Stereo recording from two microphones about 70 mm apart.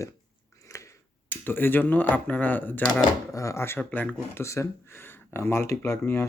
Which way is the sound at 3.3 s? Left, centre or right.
Left.